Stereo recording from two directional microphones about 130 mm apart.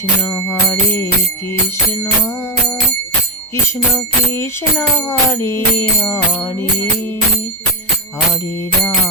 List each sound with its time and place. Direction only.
0.2 s music: 20° left (ahead or behind)
3.5 s music: 20° left (ahead or behind)